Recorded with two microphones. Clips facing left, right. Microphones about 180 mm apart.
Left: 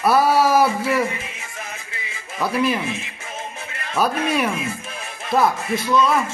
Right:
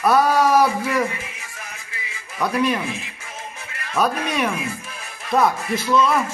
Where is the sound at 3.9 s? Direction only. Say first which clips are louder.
Left 1 dB; 5° left (ahead or behind).